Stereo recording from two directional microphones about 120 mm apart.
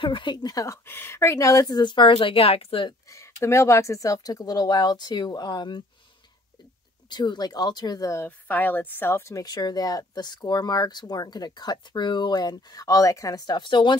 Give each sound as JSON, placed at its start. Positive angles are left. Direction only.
{"t": 0.0, "sound": "speech", "side_deg": 40}
{"t": 0.8, "sound": "speech", "side_deg": 20}
{"t": 3.1, "sound": "speech", "side_deg": 25}
{"t": 7.1, "sound": "speech", "side_deg": 35}
{"t": 8.3, "sound": "speech", "side_deg": 15}